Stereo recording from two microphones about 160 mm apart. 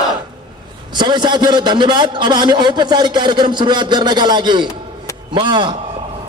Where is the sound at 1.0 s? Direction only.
30° right (ahead or behind).